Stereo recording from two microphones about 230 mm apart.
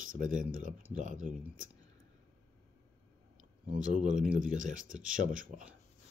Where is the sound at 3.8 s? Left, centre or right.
Right.